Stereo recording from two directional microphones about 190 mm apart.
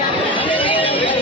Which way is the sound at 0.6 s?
30° left (ahead or behind).